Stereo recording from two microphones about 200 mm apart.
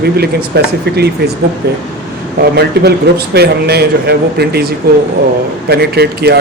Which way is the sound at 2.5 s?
55° right (ahead or behind).